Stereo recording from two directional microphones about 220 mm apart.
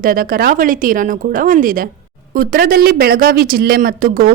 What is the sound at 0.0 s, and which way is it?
A woman's voice, 40° right (ahead or behind).